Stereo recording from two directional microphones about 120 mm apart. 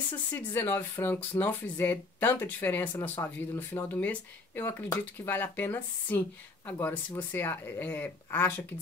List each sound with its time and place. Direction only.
0.3 s speech: 20° left (ahead or behind)